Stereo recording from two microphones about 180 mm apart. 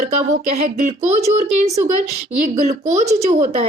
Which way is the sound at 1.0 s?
40° right (ahead or behind).